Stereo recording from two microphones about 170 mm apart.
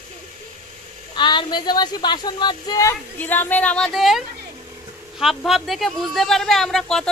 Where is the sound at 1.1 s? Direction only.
25° left (ahead or behind).